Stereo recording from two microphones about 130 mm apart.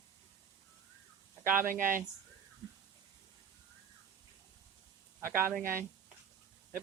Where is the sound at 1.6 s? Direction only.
90° right.